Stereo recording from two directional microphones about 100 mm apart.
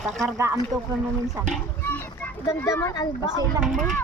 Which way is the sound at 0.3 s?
30° right (ahead or behind).